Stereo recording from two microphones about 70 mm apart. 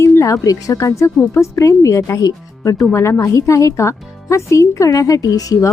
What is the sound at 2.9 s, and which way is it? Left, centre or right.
Speech, left.